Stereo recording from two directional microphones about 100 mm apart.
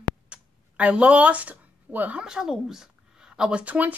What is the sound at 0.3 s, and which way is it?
Speech, 10° right (ahead or behind).